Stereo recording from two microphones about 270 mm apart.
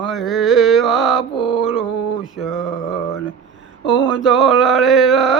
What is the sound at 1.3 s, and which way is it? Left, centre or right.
Mantra, centre.